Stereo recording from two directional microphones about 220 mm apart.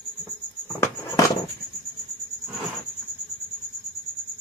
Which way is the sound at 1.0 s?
15° left (ahead or behind).